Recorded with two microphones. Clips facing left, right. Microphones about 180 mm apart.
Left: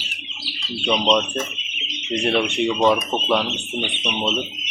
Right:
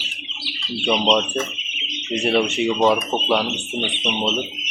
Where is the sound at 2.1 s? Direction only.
5° right (ahead or behind).